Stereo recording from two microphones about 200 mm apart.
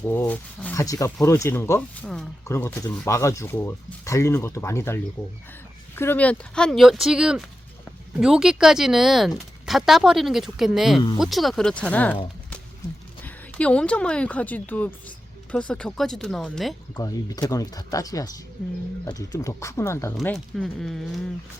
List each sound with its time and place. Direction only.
0.0 s speech: 10° left (ahead or behind)
6.0 s speech: 10° left (ahead or behind)
13.2 s speech: 5° left (ahead or behind)
17.0 s speech: 20° left (ahead or behind)
20.1 s speech: centre (ahead or behind)